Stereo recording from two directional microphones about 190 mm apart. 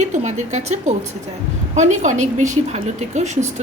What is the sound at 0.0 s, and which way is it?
A woman's voice, 35° right (ahead or behind).